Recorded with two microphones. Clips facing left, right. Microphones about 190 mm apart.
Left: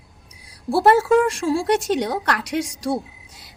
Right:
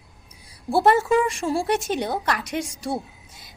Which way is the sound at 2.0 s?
75° left (ahead or behind).